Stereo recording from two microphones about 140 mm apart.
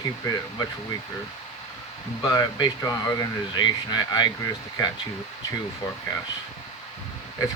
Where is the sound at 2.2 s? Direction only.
30° left (ahead or behind).